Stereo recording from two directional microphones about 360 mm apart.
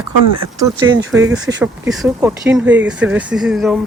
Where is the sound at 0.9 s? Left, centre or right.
Right.